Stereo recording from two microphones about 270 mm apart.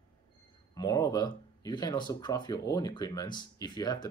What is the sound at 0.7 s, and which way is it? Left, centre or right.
Speech, centre.